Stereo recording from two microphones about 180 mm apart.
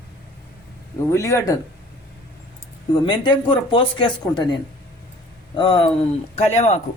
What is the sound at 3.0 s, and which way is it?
Speech, 25° left (ahead or behind).